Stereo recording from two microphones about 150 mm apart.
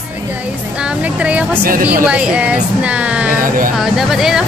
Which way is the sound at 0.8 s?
10° right (ahead or behind).